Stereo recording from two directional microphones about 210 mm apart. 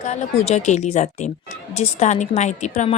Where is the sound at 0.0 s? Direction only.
30° left (ahead or behind).